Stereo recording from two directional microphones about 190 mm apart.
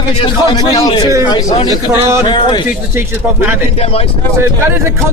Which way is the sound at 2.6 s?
10° right (ahead or behind).